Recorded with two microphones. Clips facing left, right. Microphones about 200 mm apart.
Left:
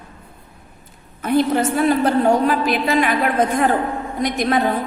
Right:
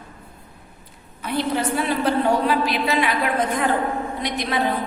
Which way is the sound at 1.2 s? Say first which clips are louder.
Left 6 dB; 50° left (ahead or behind).